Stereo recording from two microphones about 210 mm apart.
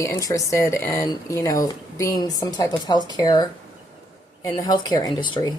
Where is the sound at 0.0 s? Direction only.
15° left (ahead or behind).